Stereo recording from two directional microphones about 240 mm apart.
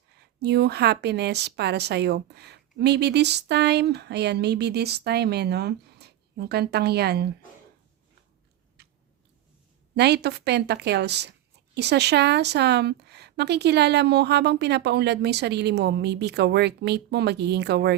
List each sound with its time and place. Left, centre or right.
0.2 s speech: right
8.8 s tick-tock: right
9.9 s speech: right